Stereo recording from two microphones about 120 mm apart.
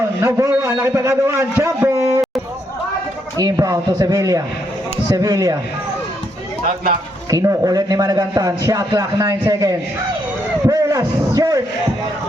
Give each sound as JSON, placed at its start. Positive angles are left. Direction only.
{"t": 0.2, "sound": "a man's voice", "side_deg": -25}
{"t": 1.9, "sound": "a sound", "side_deg": -25}
{"t": 3.3, "sound": "a man's voice", "side_deg": -30}
{"t": 7.3, "sound": "a man's voice", "side_deg": -30}